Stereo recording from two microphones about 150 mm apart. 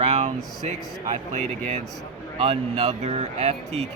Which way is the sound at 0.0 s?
45° right (ahead or behind).